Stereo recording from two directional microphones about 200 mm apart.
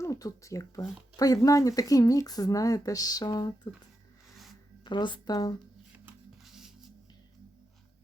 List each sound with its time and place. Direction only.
0.0 s speech: 15° left (ahead or behind)
4.9 s speech: 25° left (ahead or behind)
5.9 s music: 5° right (ahead or behind)